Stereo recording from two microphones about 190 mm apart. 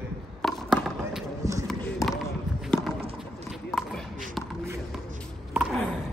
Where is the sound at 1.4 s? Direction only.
15° right (ahead or behind).